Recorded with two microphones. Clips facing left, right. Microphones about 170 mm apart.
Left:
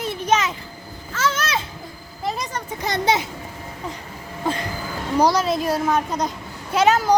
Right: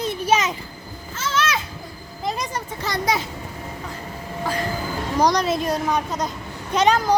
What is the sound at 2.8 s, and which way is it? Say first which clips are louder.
Speech: left 3 dB; 20° left (ahead or behind).